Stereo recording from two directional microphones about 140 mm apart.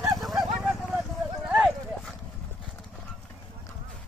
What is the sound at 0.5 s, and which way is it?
Clip-clop, centre (ahead or behind).